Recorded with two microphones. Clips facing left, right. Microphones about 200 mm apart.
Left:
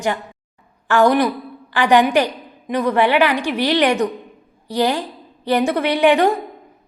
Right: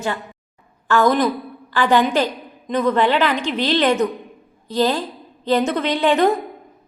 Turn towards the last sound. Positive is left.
turn(degrees=10)  # may be behind; listen again after turning